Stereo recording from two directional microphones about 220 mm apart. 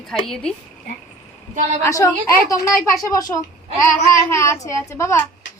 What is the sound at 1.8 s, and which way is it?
A woman's voice, 15° left (ahead or behind).